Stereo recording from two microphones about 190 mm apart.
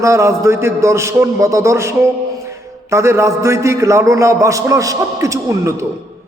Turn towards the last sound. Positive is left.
turn(degrees=-15)  # may be behind; listen again after turning